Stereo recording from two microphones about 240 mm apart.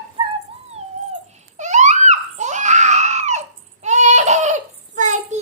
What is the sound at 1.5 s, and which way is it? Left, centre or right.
Screaming, right.